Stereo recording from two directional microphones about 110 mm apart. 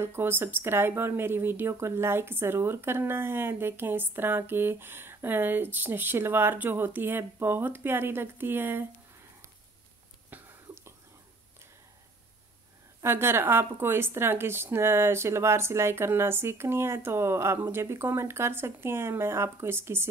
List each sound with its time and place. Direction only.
0.0 s speech: 20° right (ahead or behind)
10.3 s whispering: 15° right (ahead or behind)
13.0 s speech: 20° right (ahead or behind)